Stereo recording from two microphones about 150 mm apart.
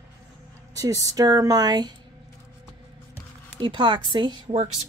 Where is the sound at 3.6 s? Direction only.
30° right (ahead or behind).